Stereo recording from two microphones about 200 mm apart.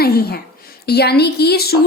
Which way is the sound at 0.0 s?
50° left (ahead or behind).